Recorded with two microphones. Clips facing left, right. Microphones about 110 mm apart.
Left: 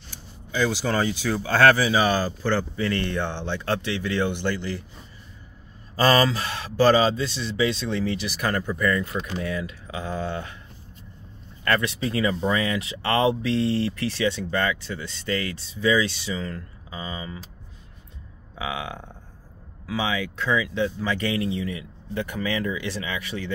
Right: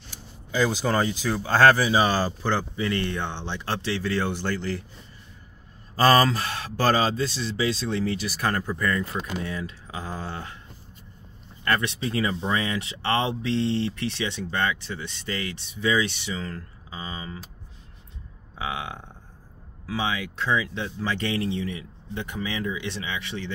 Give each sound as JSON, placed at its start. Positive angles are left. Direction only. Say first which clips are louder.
{"t": 0.6, "sound": "speech", "louder": "even", "side_deg": -35}
{"t": 2.4, "sound": "speech", "louder": "left 2 dB", "side_deg": -20}
{"t": 5.9, "sound": "speech", "louder": "right 1 dB", "side_deg": -40}
{"t": 11.6, "sound": "speech", "louder": "left 2 dB", "side_deg": -25}
{"t": 18.6, "sound": "speech", "louder": "left 1 dB", "side_deg": -30}
{"t": 19.9, "sound": "speech", "louder": "left 2 dB", "side_deg": -35}